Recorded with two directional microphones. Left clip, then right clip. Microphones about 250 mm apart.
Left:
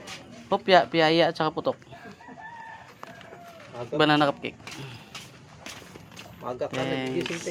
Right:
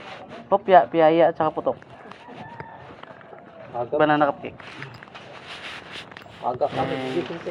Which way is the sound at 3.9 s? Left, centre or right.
Left.